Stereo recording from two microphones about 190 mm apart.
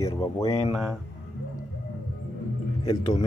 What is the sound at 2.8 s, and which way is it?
Speech, 20° left (ahead or behind).